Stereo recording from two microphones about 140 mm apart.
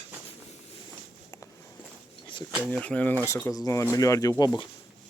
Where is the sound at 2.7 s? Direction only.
10° left (ahead or behind).